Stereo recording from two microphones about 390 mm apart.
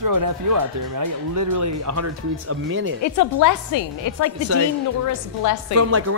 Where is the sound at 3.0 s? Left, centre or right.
Left.